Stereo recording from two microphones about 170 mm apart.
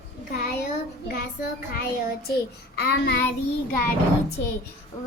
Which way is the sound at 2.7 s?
70° left (ahead or behind).